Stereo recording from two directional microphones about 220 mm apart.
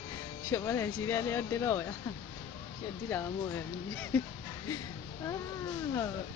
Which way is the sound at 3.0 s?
10° left (ahead or behind).